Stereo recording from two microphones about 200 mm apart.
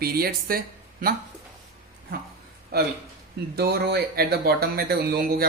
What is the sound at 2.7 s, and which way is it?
Speech, 50° right (ahead or behind).